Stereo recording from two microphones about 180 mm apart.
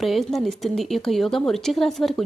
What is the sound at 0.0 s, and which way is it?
A woman's voice, centre (ahead or behind).